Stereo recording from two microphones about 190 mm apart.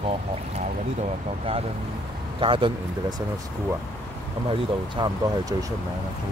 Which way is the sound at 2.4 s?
25° right (ahead or behind).